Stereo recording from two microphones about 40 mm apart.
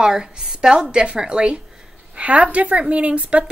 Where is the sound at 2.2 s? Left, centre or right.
Right.